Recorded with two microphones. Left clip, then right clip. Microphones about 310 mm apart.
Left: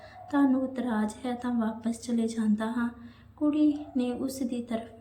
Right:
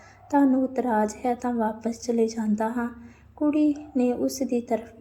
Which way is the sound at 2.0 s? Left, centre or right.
Centre.